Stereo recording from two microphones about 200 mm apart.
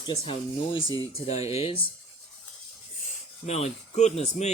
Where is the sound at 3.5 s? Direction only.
35° left (ahead or behind).